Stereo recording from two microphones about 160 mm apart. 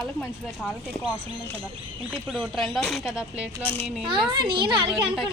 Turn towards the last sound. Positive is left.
turn(degrees=-30)  # may be behind; listen again after turning